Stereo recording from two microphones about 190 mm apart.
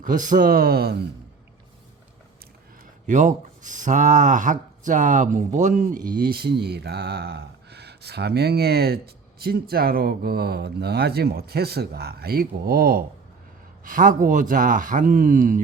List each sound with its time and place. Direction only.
0.0 s speech: 45° right (ahead or behind)
3.1 s speech: 40° right (ahead or behind)